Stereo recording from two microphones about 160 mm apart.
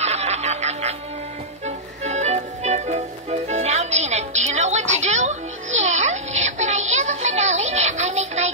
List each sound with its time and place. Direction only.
0.0 s music: 45° right (ahead or behind)
2.0 s music: 45° right (ahead or behind)